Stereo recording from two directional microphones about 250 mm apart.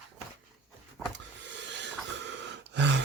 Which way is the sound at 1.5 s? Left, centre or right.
Right.